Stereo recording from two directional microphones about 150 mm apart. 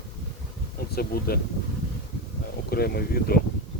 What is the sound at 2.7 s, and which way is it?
Speech, 90° left.